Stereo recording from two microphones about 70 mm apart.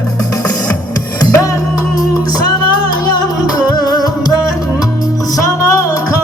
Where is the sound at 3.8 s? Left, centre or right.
Left.